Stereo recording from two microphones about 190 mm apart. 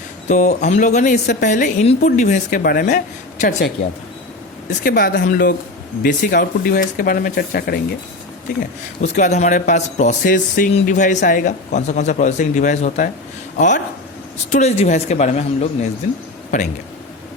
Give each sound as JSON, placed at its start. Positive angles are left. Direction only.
{"t": 0.3, "sound": "speech", "side_deg": 40}
{"t": 4.8, "sound": "speech", "side_deg": 50}
{"t": 9.0, "sound": "speech", "side_deg": 40}